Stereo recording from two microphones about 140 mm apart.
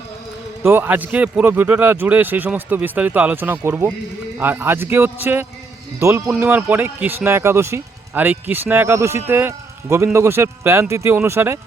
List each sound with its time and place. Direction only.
0.6 s speech: 15° right (ahead or behind)
6.3 s speech: 10° right (ahead or behind)